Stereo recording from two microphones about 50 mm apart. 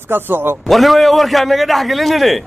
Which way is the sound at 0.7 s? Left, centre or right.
Centre.